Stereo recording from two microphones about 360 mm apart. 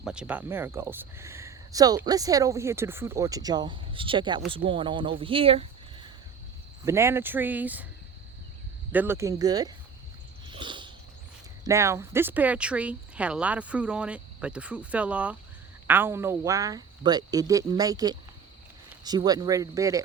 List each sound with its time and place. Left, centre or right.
0.0 s speech: centre
8.9 s speech: centre
10.4 s a sound: centre
11.6 s speech: centre